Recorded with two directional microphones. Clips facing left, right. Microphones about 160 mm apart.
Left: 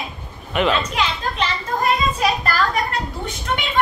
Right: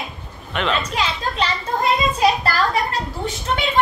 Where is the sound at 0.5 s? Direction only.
5° left (ahead or behind).